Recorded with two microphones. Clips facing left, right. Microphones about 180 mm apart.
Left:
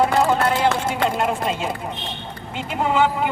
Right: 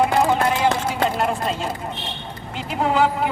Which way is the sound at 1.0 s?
Centre (ahead or behind).